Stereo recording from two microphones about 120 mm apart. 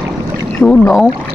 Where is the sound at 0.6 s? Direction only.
10° left (ahead or behind).